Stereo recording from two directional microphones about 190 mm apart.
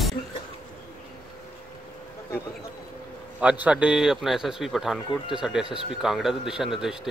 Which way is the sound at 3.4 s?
5° right (ahead or behind).